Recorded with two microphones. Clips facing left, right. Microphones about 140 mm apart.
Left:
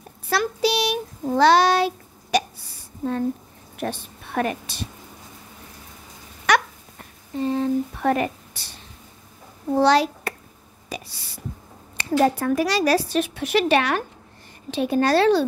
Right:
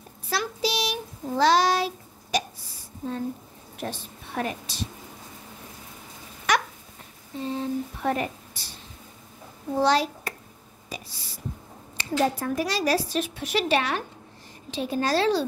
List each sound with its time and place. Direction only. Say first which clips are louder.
0.3 s speech: left 6 dB; 60° left (ahead or behind)
2.3 s hiccup: left 6 dB; 65° left (ahead or behind)
3.8 s a woman's voice: left 5 dB; 65° left (ahead or behind)
6.5 s a sound: left 4 dB; 70° left (ahead or behind)
7.3 s speech: left 7 dB; 65° left (ahead or behind)
9.8 s a child's voice: left 4 dB; 70° left (ahead or behind)